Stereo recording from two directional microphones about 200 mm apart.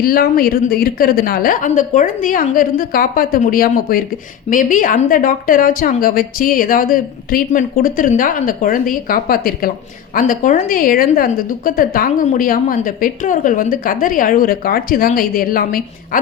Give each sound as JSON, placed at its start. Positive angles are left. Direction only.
{"t": 0.0, "sound": "a woman's voice", "side_deg": 50}